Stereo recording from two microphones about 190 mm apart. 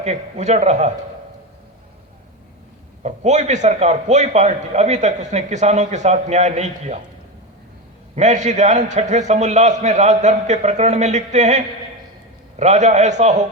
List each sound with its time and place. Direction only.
0.0 s a man's voice: 35° right (ahead or behind)
3.0 s a man's voice: 35° right (ahead or behind)
8.1 s a man's voice: 40° right (ahead or behind)